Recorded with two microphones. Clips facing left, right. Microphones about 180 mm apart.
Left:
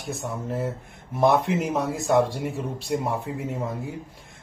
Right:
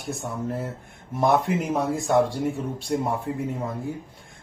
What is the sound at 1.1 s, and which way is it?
Speech, centre (ahead or behind).